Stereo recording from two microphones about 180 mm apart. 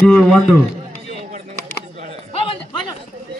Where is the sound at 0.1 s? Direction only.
Centre (ahead or behind).